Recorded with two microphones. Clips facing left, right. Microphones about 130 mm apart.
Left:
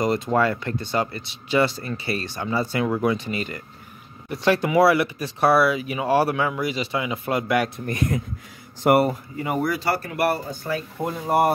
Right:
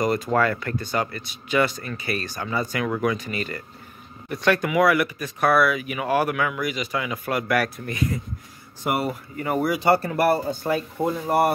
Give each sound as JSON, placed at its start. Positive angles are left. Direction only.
{"t": 0.0, "sound": "speech", "side_deg": 25}
{"t": 7.8, "sound": "speech", "side_deg": 50}
{"t": 9.6, "sound": "speech", "side_deg": -10}
{"t": 9.8, "sound": "speech", "side_deg": -25}
{"t": 11.2, "sound": "speech", "side_deg": 15}